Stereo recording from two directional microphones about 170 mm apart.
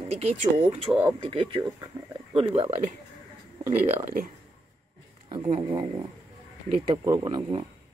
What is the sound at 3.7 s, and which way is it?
Speech, 45° right (ahead or behind).